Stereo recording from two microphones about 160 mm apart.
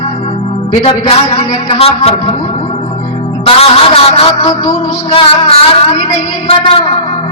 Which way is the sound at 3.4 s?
35° left (ahead or behind).